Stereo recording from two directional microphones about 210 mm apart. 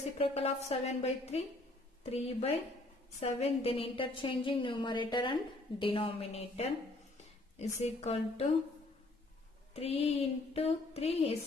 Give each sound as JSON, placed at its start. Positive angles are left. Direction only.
{"t": 0.2, "sound": "a woman's voice", "side_deg": 30}
{"t": 7.8, "sound": "a woman's voice", "side_deg": 30}
{"t": 9.8, "sound": "a woman's voice", "side_deg": 30}